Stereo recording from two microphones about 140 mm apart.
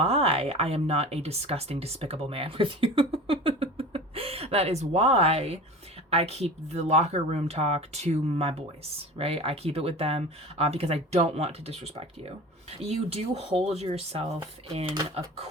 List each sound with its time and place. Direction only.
0.0 s speech: 45° right (ahead or behind)